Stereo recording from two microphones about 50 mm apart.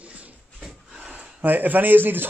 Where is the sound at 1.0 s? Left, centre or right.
Right.